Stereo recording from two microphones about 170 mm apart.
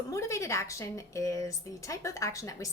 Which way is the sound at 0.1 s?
15° left (ahead or behind).